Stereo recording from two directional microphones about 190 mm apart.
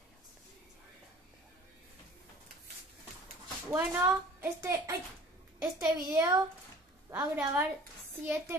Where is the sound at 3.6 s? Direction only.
10° right (ahead or behind).